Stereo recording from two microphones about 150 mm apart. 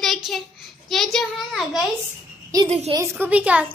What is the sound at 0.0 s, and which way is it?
Child singing, centre (ahead or behind).